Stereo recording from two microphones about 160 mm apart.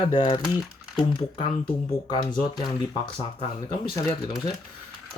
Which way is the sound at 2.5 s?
30° left (ahead or behind).